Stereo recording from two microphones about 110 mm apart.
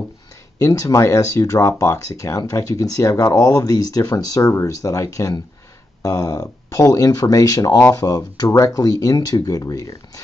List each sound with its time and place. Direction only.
0.6 s speech: 30° left (ahead or behind)